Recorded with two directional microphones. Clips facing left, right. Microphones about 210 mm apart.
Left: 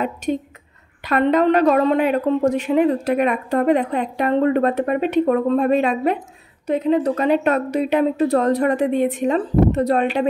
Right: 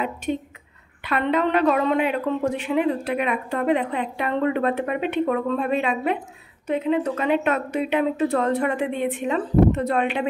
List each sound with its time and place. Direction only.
0.0 s a woman's voice: 40° left (ahead or behind)